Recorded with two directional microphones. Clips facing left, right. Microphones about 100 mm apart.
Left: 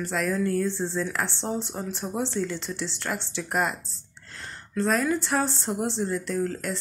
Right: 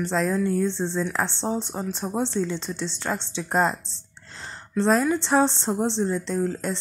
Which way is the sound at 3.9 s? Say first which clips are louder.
Right 1 dB; 25° right (ahead or behind).